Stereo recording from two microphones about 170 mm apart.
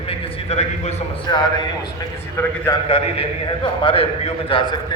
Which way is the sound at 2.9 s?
30° left (ahead or behind).